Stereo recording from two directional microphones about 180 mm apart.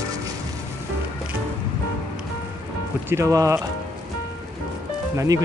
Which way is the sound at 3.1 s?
15° right (ahead or behind).